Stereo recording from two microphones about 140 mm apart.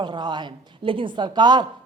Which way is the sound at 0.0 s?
30° right (ahead or behind).